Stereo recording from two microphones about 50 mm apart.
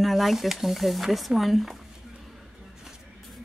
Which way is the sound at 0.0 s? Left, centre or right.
Centre.